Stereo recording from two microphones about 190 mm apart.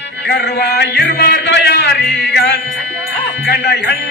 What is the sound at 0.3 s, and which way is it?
Mantra, 60° left (ahead or behind).